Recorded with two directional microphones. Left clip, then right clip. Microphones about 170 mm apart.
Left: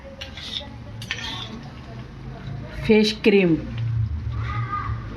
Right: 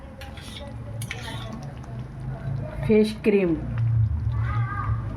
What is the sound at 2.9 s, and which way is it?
Speech, 40° left (ahead or behind).